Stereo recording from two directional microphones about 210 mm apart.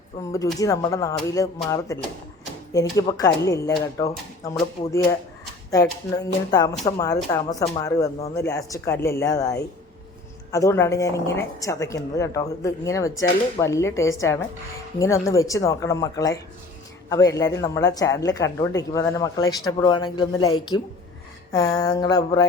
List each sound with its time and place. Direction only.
0.2 s a woman's voice: 15° left (ahead or behind)
5.7 s a woman's voice: 15° left (ahead or behind)